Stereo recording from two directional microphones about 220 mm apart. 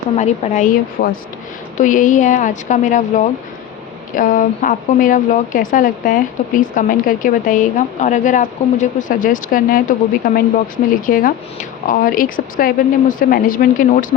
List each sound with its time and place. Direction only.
0.2 s a woman's voice: 35° left (ahead or behind)